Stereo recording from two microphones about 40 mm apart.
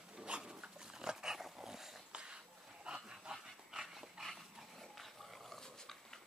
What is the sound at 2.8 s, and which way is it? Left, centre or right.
Dog, right.